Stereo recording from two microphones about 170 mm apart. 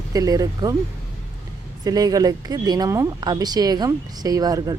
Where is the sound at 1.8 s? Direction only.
20° right (ahead or behind).